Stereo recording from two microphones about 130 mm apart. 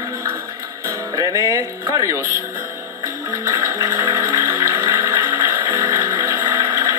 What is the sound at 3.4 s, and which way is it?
Music, 20° right (ahead or behind).